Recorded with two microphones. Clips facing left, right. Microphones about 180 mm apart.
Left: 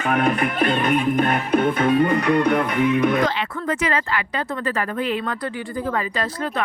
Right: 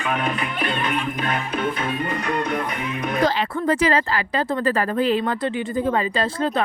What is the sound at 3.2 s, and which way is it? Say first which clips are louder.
Speech: right 3 dB; 35° right (ahead or behind).